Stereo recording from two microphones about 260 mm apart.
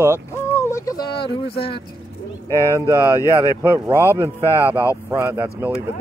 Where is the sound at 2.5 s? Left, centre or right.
Centre.